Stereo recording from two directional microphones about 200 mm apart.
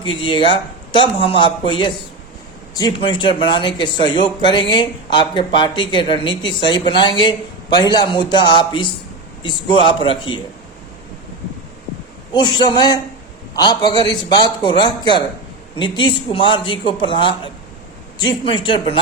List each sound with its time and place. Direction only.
0.0 s a woman's voice: 25° left (ahead or behind)
12.3 s a woman's voice: 20° left (ahead or behind)